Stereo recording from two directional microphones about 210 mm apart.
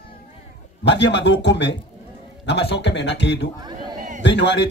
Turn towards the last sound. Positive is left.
turn(degrees=55)  # may be behind; listen again after turning